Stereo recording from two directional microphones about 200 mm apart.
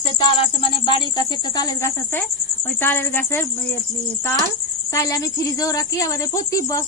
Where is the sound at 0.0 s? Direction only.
25° left (ahead or behind); by 3.8 s 10° left (ahead or behind).